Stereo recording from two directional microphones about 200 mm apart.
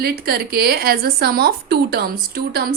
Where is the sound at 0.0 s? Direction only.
50° right (ahead or behind).